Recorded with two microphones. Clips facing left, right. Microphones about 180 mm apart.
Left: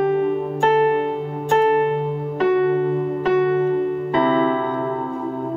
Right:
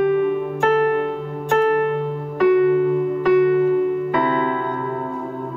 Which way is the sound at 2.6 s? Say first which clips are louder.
Right 2 dB; 35° left (ahead or behind).